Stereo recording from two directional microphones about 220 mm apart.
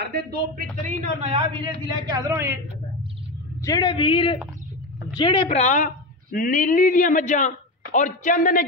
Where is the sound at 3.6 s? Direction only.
20° left (ahead or behind).